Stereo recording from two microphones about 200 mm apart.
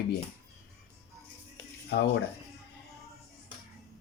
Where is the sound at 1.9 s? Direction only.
55° left (ahead or behind).